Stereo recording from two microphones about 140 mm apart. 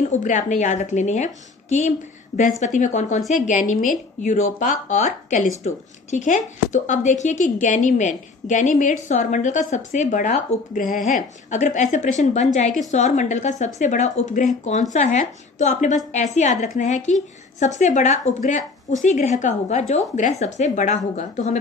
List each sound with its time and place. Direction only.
0.1 s a woman's voice: 65° left (ahead or behind)